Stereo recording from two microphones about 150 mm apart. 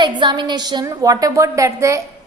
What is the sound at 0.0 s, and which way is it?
A woman's voice, 30° right (ahead or behind).